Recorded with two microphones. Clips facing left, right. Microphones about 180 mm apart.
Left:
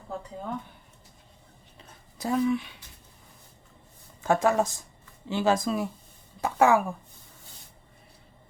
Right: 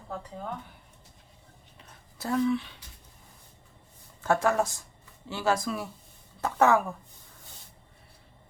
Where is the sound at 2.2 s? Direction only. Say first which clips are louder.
Left 1 dB; 15° left (ahead or behind).